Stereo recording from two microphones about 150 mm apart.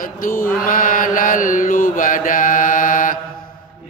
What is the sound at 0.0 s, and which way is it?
Mantra, 65° left (ahead or behind).